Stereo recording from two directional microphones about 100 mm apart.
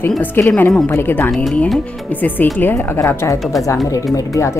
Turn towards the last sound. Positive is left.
turn(degrees=30)  # may be behind; listen again after turning